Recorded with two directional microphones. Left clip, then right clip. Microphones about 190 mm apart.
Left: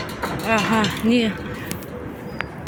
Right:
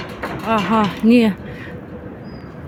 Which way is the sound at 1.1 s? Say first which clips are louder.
Right 5 dB; 40° right (ahead or behind).